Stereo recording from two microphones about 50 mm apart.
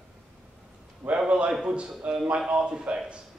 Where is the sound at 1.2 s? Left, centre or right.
Centre.